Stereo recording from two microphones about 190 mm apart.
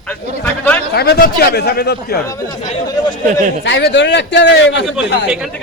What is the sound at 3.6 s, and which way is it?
Speech, 70° left (ahead or behind).